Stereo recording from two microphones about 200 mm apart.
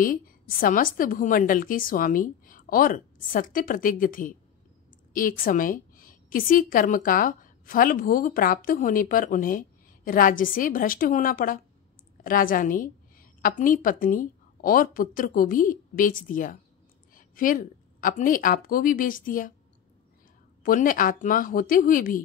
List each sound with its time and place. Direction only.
0.0 s a woman's voice: 45° left (ahead or behind)
20.6 s a woman's voice: 45° left (ahead or behind)